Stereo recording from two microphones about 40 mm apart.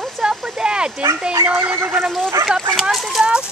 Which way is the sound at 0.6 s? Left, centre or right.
Right.